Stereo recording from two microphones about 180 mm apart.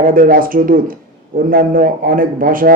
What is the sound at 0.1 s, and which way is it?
Speech, 50° right (ahead or behind).